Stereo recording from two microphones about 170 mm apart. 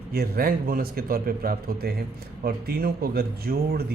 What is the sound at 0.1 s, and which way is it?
A man's voice, 65° right (ahead or behind).